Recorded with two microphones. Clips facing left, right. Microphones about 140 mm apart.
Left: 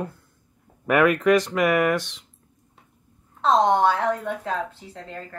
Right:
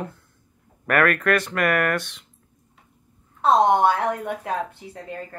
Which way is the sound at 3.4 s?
10° right (ahead or behind).